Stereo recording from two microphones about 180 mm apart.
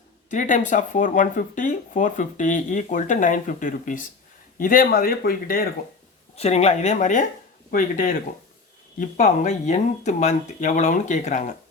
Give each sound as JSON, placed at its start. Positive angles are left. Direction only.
{"t": 0.3, "sound": "speech", "side_deg": 45}
{"t": 6.3, "sound": "speech", "side_deg": 35}